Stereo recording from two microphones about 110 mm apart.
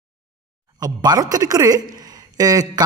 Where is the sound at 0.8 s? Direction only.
35° right (ahead or behind).